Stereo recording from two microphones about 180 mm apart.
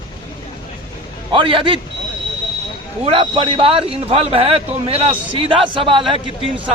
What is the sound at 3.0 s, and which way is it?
A man's voice, 30° right (ahead or behind).